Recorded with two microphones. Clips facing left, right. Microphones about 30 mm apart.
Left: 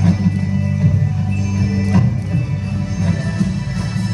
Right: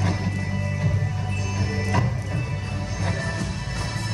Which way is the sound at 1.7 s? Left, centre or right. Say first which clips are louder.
Left 7 dB; centre.